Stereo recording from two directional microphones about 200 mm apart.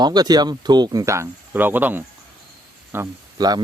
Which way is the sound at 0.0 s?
20° right (ahead or behind).